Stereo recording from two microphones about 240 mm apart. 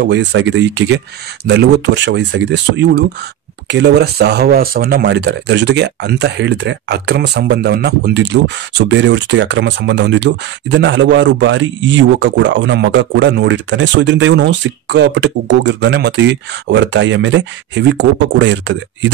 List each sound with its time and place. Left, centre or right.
0.0 s speech: right